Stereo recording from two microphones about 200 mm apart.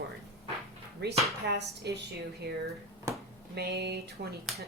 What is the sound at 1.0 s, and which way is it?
Speech, 55° right (ahead or behind).